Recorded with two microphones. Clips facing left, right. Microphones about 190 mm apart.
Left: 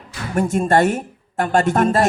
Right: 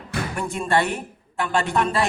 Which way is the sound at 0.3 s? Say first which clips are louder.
Left 7 dB; 45° left (ahead or behind).